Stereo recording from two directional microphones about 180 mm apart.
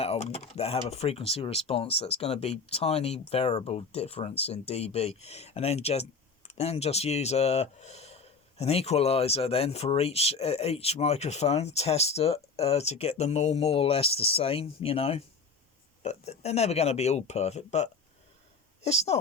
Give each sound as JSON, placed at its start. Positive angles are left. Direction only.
{"t": 0.0, "sound": "a woman's voice", "side_deg": 35}